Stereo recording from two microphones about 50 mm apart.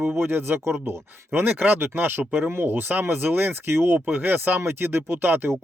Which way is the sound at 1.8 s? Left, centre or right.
Right.